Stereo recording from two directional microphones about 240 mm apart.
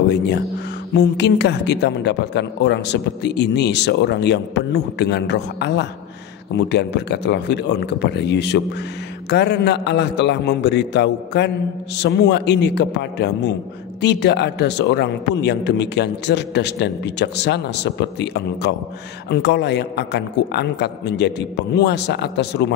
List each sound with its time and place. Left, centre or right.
0.9 s a woman's voice: left